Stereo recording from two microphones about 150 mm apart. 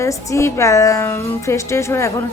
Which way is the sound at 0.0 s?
20° left (ahead or behind).